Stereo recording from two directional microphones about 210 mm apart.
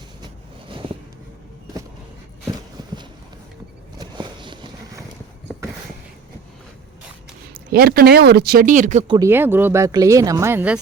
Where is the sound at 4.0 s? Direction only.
20° right (ahead or behind).